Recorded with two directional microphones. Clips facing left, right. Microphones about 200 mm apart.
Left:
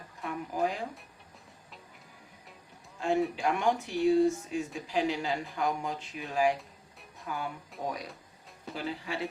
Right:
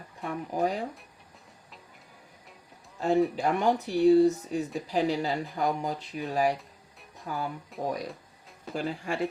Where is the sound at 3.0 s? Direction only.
40° right (ahead or behind).